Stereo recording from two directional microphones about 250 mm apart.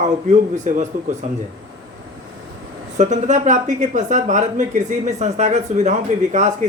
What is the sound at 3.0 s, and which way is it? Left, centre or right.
A man's voice, right.